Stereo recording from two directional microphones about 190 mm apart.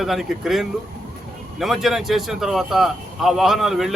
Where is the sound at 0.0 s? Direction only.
Centre (ahead or behind).